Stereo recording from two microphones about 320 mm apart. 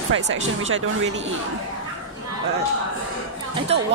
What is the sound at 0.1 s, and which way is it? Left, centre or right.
Speech, right.